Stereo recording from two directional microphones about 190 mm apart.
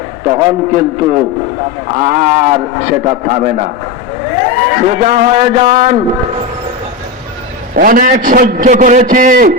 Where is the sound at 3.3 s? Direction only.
45° right (ahead or behind).